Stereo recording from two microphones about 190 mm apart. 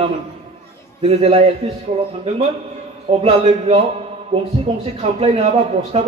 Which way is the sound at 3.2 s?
30° right (ahead or behind).